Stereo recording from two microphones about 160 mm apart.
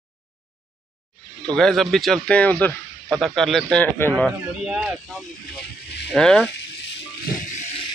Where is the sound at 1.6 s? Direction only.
Centre (ahead or behind).